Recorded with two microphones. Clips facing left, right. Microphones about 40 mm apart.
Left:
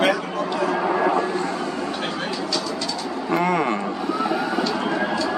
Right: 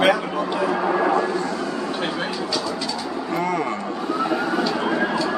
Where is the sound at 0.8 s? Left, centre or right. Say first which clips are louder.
Right 1 dB; centre.